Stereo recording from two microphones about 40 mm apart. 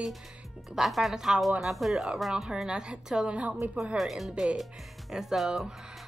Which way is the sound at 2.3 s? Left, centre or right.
Centre.